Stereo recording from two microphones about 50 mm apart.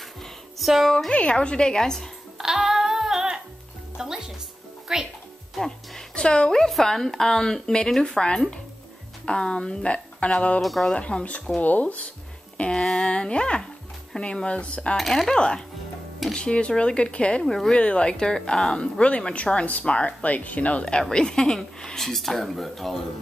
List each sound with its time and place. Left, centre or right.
0.2 s music: centre
1.1 s speech: left
2.3 s music: centre
4.0 s speech: centre
5.6 s speech: centre
10.6 s speech: centre
10.9 s speech: centre
12.5 s speech: centre
15.0 s speech: centre
15.2 s speech: centre; by 20.8 s left
21.1 s speech: centre